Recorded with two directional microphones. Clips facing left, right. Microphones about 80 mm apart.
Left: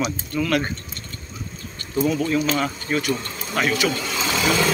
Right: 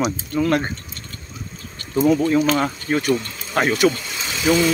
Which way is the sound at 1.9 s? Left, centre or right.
Right.